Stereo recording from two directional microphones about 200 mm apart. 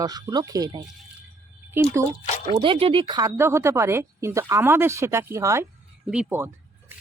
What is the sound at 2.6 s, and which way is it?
A woman's voice, 25° right (ahead or behind).